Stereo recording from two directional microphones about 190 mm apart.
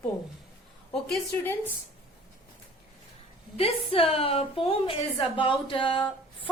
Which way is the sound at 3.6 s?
30° left (ahead or behind).